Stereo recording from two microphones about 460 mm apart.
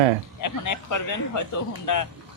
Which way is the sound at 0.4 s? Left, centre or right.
Left.